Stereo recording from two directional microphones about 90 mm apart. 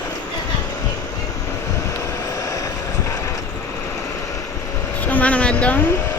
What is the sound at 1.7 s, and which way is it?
Vehicle, 35° left (ahead or behind).